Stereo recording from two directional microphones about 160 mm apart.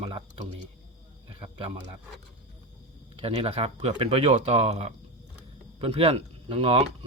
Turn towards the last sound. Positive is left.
turn(degrees=-40)  # may be behind; listen again after turning